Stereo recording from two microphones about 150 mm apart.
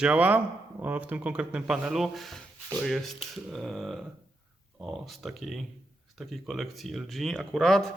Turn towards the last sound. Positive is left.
turn(degrees=0)  # may be behind; listen again after turning